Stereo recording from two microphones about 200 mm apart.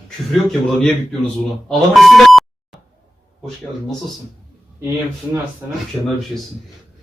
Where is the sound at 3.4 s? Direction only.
Centre (ahead or behind).